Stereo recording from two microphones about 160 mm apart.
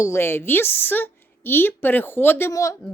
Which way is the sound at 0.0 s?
15° left (ahead or behind).